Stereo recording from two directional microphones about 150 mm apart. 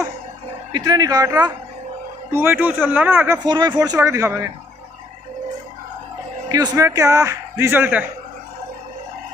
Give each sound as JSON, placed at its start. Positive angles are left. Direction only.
{"t": 0.7, "sound": "speech", "side_deg": -25}
{"t": 3.4, "sound": "speech", "side_deg": -30}
{"t": 6.5, "sound": "speech", "side_deg": -25}